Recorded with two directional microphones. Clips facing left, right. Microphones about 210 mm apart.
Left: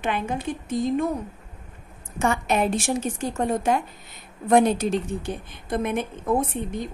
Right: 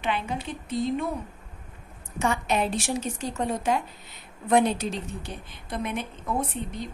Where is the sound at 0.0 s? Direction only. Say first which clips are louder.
Left 3 dB; 50° left (ahead or behind).